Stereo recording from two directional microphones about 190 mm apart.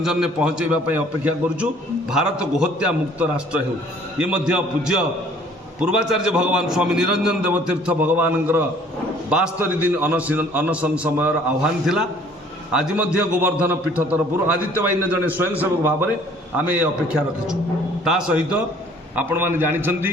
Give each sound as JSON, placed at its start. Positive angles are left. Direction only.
{"t": 0.0, "sound": "a man's voice", "side_deg": -5}
{"t": 18.0, "sound": "a man's voice", "side_deg": -5}